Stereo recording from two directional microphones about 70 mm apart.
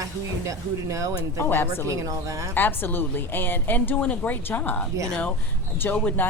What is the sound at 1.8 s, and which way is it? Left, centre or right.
Speech, right.